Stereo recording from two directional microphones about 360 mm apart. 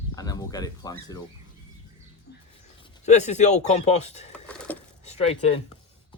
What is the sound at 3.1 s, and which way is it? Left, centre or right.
Speech, centre.